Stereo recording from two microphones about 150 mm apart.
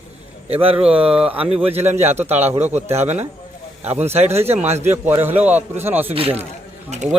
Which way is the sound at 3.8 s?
15° right (ahead or behind).